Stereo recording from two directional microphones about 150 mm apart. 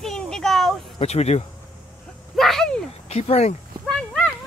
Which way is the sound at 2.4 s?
Centre (ahead or behind).